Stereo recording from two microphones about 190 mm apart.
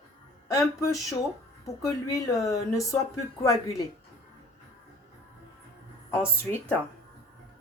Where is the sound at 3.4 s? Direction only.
15° left (ahead or behind).